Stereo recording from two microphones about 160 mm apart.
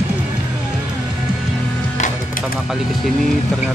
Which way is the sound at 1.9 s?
55° left (ahead or behind).